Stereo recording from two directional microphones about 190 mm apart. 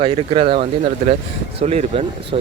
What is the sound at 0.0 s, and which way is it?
Speech, 30° right (ahead or behind).